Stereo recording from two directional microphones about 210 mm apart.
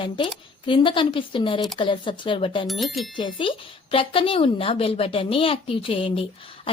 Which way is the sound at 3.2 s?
25° left (ahead or behind).